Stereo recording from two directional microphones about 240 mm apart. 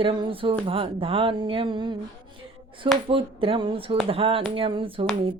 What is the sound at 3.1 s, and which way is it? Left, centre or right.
Music, right.